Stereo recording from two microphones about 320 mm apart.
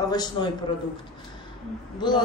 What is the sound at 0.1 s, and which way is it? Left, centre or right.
Speech, centre.